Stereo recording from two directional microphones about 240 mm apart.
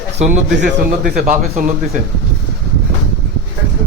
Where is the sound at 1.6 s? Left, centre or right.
Right.